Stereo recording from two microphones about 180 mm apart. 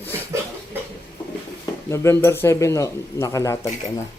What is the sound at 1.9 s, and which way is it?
A man's voice, 15° left (ahead or behind).